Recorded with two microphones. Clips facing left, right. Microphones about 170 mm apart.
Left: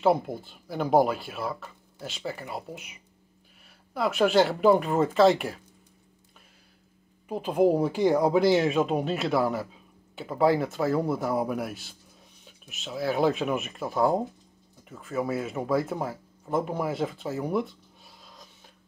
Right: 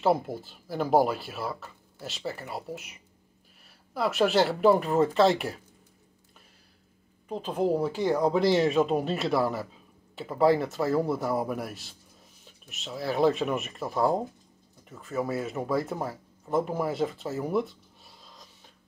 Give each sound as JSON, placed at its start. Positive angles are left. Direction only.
{"t": 0.0, "sound": "speech", "side_deg": 0}
{"t": 7.2, "sound": "speech", "side_deg": 10}